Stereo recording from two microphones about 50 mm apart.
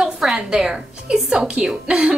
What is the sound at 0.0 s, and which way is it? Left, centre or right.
A woman's voice, centre.